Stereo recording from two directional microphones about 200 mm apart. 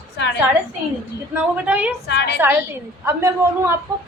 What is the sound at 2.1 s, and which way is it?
Speech, 55° left (ahead or behind).